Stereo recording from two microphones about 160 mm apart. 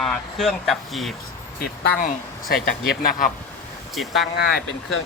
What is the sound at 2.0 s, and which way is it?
Speech, 70° left (ahead or behind).